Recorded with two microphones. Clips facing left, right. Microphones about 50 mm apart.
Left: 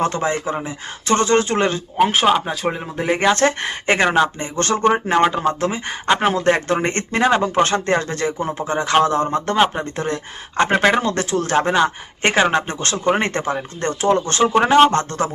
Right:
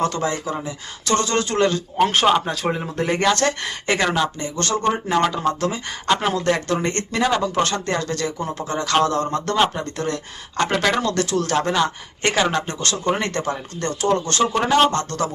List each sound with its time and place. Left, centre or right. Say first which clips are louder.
0.0 s speech: left 2 dB; left
2.0 s speech: left 1 dB; centre
3.2 s speech: left 5 dB; left